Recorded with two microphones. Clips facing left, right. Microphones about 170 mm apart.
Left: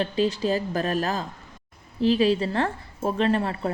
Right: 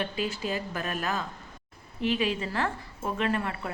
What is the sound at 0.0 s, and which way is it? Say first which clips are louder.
A woman's voice: left 7 dB; 35° left (ahead or behind).